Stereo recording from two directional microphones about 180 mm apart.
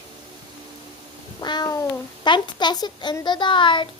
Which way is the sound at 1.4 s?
25° left (ahead or behind).